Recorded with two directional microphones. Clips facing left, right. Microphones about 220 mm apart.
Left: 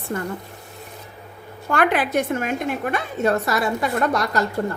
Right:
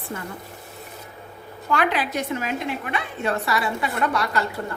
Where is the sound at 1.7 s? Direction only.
50° left (ahead or behind).